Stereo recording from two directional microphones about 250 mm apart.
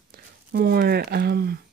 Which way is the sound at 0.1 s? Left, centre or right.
Right.